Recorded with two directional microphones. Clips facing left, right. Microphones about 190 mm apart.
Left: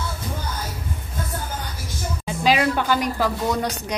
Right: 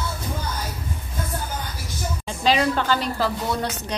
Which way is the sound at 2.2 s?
10° left (ahead or behind).